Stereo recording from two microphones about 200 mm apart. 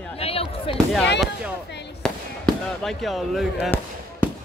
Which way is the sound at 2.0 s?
5° left (ahead or behind).